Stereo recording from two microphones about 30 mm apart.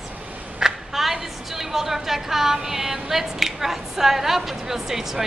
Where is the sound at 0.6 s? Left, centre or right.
Right.